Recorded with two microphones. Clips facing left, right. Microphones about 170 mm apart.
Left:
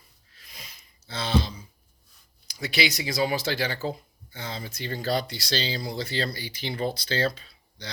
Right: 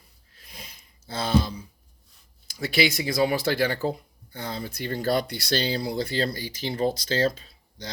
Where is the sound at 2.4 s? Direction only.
50° right (ahead or behind).